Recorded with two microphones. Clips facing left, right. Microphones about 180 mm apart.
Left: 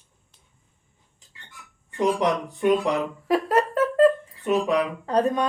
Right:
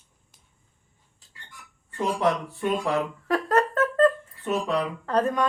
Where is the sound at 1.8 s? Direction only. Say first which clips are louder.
Left 2 dB; 15° left (ahead or behind).